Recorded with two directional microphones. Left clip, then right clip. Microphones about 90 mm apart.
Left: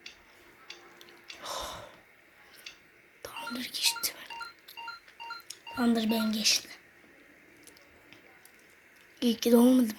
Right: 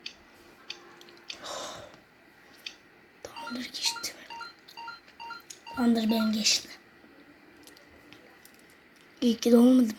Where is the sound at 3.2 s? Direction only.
20° left (ahead or behind).